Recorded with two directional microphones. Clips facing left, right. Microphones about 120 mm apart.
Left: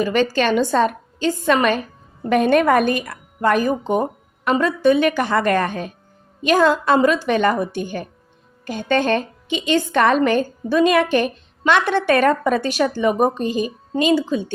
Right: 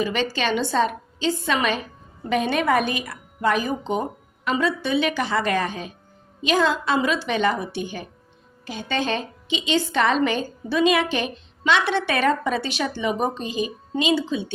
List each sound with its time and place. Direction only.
0.0 s a woman's voice: 45° left (ahead or behind)